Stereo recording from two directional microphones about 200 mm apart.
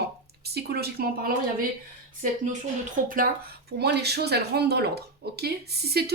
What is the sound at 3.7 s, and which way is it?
Speech, 55° right (ahead or behind).